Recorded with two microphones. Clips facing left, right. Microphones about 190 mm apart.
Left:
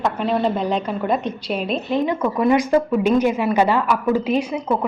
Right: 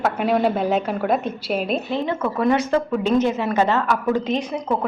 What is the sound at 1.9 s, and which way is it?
A woman's voice, 15° left (ahead or behind).